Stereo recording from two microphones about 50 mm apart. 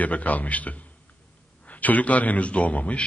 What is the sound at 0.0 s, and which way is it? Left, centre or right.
A man's voice, left.